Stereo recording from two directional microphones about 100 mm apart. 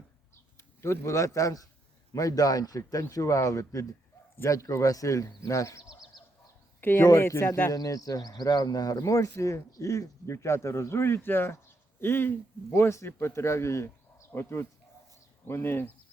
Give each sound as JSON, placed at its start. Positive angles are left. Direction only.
{"t": 0.5, "sound": "a man's voice", "side_deg": 25}
{"t": 6.8, "sound": "speech", "side_deg": 25}
{"t": 7.7, "sound": "speech", "side_deg": 35}